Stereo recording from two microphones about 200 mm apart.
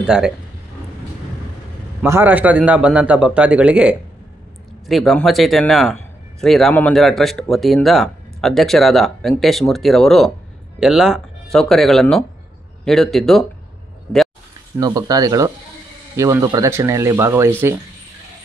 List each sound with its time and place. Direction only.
0.0 s speech: 5° right (ahead or behind)
2.0 s speech: 10° right (ahead or behind)
14.8 s speech: 20° right (ahead or behind)